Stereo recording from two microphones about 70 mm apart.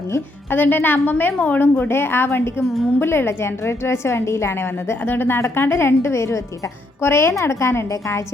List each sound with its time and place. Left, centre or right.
0.5 s a woman's voice: left